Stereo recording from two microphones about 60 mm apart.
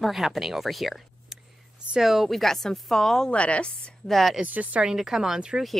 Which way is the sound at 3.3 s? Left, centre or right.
Centre.